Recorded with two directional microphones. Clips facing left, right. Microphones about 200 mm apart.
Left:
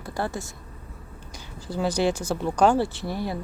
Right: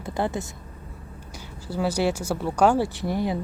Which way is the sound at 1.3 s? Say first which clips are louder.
Right 1 dB; 10° right (ahead or behind).